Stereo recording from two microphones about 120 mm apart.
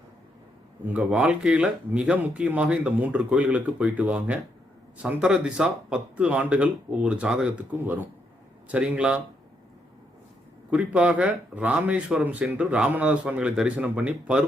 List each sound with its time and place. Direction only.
0.9 s speech: 10° right (ahead or behind)
10.7 s speech: 10° right (ahead or behind)